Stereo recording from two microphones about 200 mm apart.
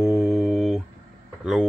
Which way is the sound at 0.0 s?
Centre (ahead or behind).